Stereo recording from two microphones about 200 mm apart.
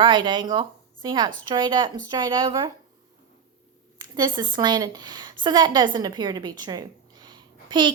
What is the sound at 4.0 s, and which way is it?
A woman's voice, 20° right (ahead or behind).